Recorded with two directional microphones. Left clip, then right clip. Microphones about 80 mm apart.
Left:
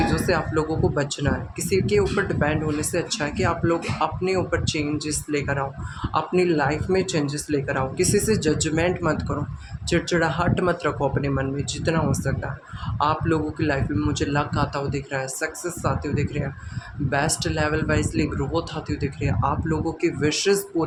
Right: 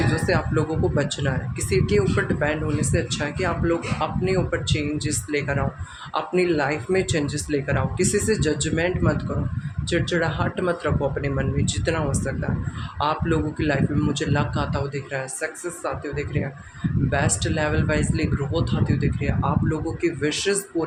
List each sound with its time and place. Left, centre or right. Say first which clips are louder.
0.1 s speech: even; left
11.2 s speech: even; centre